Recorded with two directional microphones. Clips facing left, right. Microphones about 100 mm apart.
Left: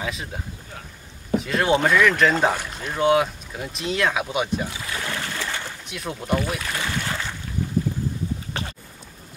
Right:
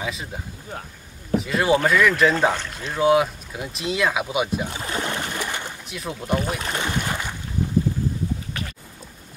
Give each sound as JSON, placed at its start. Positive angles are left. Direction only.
{"t": 0.0, "sound": "speech", "side_deg": 0}
{"t": 4.6, "sound": "speech", "side_deg": -40}
{"t": 4.9, "sound": "a sound", "side_deg": -25}
{"t": 5.9, "sound": "speech", "side_deg": 0}
{"t": 6.6, "sound": "boat", "side_deg": -25}
{"t": 8.5, "sound": "boat", "side_deg": 30}